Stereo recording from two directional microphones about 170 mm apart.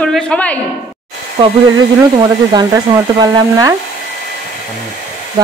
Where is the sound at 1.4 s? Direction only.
35° right (ahead or behind).